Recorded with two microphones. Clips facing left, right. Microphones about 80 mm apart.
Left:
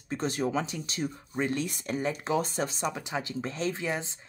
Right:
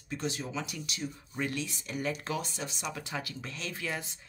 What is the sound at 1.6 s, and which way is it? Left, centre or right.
Speech, left.